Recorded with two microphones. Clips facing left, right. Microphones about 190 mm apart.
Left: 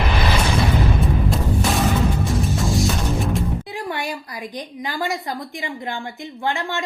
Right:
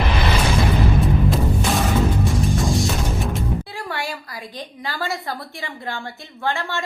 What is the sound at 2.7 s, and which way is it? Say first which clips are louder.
Music: left 1 dB; centre (ahead or behind).